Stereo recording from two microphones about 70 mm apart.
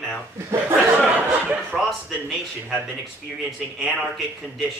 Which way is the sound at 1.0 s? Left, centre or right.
Right.